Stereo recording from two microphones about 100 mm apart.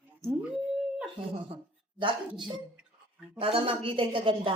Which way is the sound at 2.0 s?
55° right (ahead or behind).